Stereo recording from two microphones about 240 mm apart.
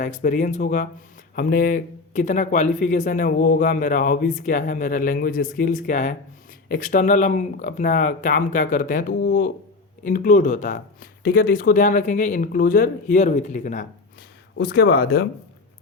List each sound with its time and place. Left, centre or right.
0.0 s speech: left
14.6 s speech: left